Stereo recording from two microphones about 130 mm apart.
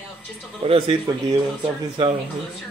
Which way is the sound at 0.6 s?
45° right (ahead or behind).